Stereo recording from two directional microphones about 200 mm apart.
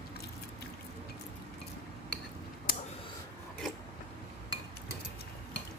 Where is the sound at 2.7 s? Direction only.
45° left (ahead or behind).